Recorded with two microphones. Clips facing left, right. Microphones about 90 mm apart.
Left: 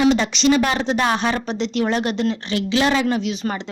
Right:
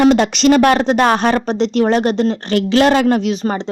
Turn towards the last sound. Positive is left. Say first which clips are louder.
# right 6 dB
turn(degrees=-30)  # may be behind; listen again after turning